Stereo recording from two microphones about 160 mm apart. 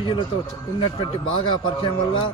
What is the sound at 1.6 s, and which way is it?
Speech, 30° left (ahead or behind).